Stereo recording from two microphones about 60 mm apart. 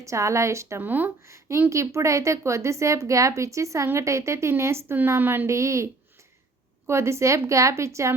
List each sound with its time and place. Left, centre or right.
0.0 s speech: right
0.8 s speech: right
1.3 s speech: right
5.5 s speech: right